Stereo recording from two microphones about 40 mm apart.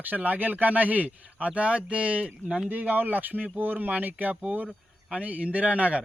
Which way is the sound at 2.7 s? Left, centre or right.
Right.